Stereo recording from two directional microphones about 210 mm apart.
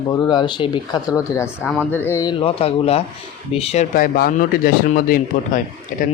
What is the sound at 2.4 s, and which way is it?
Speech, 30° left (ahead or behind).